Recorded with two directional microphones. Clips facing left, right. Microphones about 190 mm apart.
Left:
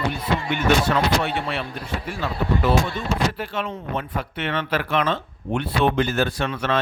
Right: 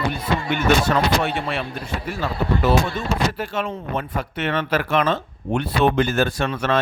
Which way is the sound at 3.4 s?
45° right (ahead or behind).